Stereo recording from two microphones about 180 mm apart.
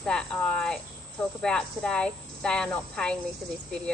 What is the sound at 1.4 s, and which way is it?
Speech, 5° left (ahead or behind).